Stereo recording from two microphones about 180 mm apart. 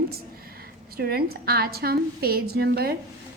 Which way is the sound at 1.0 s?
60° right (ahead or behind).